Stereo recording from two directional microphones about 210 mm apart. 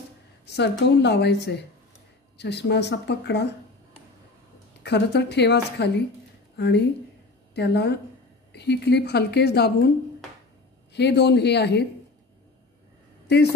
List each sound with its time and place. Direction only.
0.5 s a woman's voice: 55° left (ahead or behind)
4.8 s a woman's voice: 55° left (ahead or behind)
10.9 s a woman's voice: 55° left (ahead or behind)